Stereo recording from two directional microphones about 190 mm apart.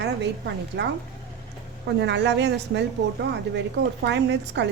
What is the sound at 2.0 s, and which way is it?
A woman's voice, 65° right (ahead or behind).